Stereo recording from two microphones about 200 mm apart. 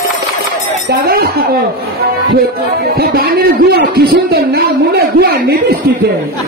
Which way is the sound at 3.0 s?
50° right (ahead or behind).